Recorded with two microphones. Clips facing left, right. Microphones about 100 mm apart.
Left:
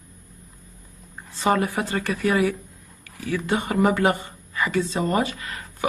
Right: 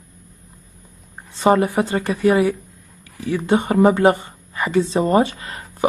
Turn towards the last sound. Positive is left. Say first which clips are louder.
# right 2 dB
turn(degrees=-30)  # may be behind; listen again after turning